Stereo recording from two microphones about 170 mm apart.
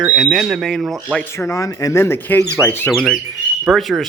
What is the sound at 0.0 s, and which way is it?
Speech, centre (ahead or behind).